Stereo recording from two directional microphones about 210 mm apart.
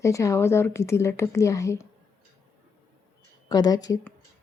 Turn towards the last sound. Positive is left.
turn(degrees=20)  # may be behind; listen again after turning